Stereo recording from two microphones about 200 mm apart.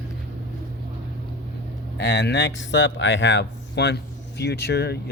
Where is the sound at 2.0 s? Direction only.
60° left (ahead or behind).